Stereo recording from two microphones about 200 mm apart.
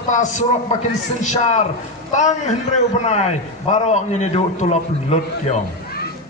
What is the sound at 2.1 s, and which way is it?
A man's voice, 35° left (ahead or behind).